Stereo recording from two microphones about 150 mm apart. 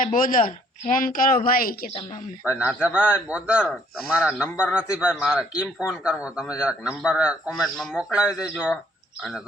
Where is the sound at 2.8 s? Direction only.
10° right (ahead or behind).